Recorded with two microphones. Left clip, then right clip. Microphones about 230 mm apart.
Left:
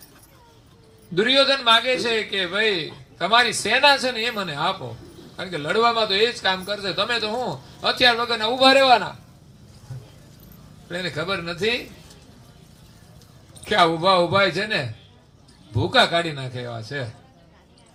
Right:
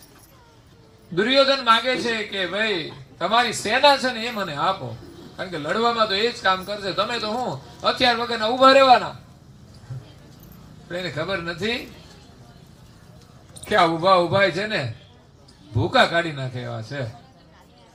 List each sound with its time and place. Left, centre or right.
1.1 s a man's voice: left
10.9 s a man's voice: left
13.7 s a man's voice: left